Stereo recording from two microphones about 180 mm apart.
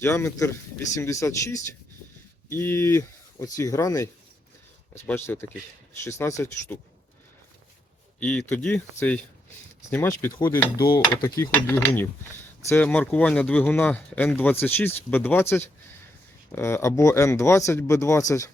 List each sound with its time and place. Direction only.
0.0 s speech: 15° left (ahead or behind)
8.2 s speech: 5° left (ahead or behind)
10.3 s speech: 25° left (ahead or behind)